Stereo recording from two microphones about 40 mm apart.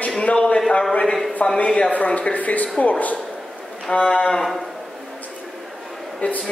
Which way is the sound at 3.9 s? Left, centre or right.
Left.